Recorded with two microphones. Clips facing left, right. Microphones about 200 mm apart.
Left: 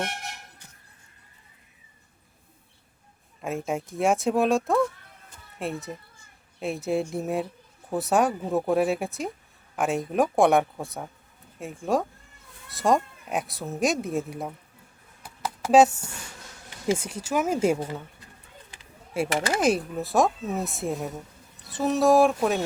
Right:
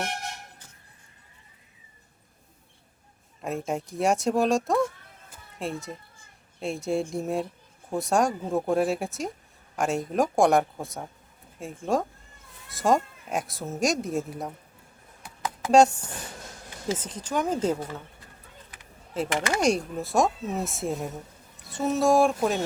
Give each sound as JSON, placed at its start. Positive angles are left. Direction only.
{"t": 3.4, "sound": "speech", "side_deg": 0}
{"t": 15.7, "sound": "speech", "side_deg": 5}
{"t": 17.7, "sound": "speech", "side_deg": 20}
{"t": 19.1, "sound": "speech", "side_deg": 10}